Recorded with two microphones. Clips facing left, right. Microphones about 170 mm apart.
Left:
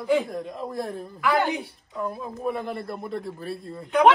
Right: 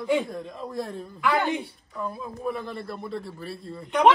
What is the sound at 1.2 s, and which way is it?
Speech, centre (ahead or behind).